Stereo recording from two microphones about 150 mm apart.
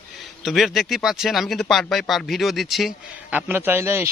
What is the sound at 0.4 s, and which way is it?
Speech, centre (ahead or behind).